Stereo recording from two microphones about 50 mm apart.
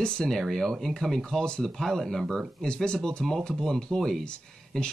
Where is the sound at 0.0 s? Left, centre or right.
Centre.